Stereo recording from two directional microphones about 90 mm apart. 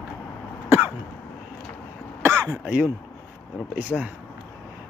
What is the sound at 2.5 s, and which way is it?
Speech, 10° right (ahead or behind).